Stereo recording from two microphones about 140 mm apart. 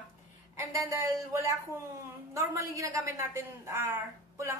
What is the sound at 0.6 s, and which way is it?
A woman's voice, 20° right (ahead or behind).